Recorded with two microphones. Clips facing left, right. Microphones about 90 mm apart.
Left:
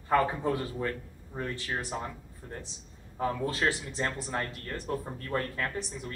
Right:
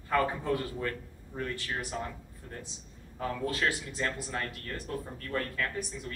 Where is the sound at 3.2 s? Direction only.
25° left (ahead or behind).